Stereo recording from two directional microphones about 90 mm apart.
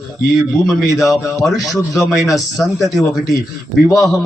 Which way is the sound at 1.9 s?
Centre (ahead or behind).